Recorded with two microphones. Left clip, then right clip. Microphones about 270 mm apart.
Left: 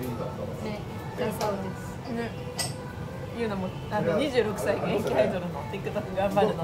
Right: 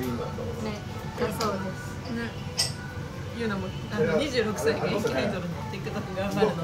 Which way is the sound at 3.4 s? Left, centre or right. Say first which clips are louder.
Right 1 dB; centre.